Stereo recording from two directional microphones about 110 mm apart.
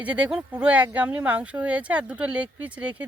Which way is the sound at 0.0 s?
10° right (ahead or behind).